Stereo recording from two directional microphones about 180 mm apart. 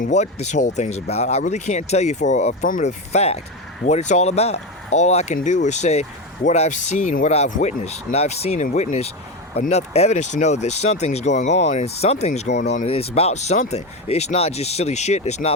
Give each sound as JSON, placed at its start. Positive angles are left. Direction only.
{"t": 0.0, "sound": "speech", "side_deg": 40}